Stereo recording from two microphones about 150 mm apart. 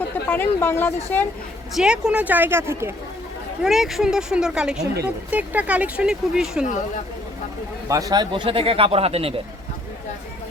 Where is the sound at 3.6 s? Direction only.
Centre (ahead or behind).